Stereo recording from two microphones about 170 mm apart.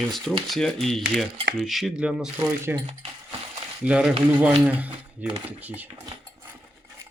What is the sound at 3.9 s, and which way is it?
Speech, 5° right (ahead or behind).